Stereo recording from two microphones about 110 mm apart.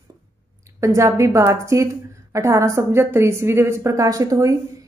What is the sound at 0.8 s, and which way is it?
A woman's voice, 25° right (ahead or behind).